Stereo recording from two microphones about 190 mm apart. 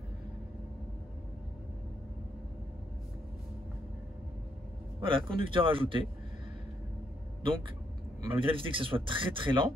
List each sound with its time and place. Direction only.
5.0 s speech: 25° right (ahead or behind)
8.2 s speech: 25° right (ahead or behind)